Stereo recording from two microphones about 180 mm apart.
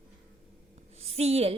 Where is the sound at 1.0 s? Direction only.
35° right (ahead or behind).